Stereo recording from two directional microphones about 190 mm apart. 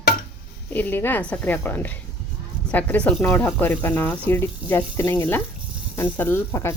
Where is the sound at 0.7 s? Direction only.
10° left (ahead or behind).